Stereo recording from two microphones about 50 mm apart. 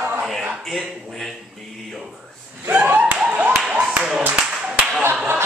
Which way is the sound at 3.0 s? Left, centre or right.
Right.